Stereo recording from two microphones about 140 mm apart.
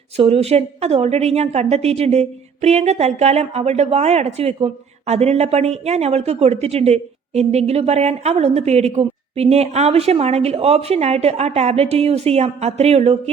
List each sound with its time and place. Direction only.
0.2 s a woman's voice: 45° right (ahead or behind)